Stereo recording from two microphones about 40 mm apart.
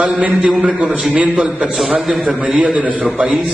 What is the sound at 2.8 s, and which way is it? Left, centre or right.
Speech, right.